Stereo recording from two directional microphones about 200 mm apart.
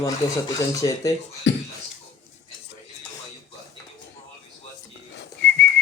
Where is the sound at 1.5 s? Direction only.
65° left (ahead or behind).